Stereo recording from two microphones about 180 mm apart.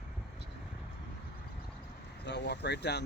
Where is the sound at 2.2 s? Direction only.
70° left (ahead or behind).